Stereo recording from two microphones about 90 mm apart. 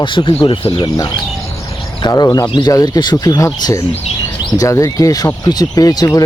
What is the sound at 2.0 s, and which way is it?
Speech, 45° left (ahead or behind).